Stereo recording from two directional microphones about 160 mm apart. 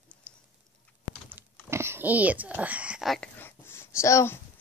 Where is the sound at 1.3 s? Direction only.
15° right (ahead or behind).